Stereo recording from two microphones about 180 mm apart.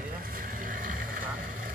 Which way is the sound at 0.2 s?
50° right (ahead or behind).